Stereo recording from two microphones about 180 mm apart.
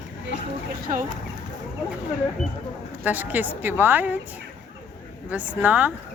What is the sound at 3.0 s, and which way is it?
A woman's voice, 10° right (ahead or behind).